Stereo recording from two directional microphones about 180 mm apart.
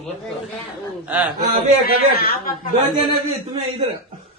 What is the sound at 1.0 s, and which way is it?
Speech, 10° right (ahead or behind).